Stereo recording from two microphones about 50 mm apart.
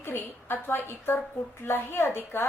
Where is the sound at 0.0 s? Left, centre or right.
Left.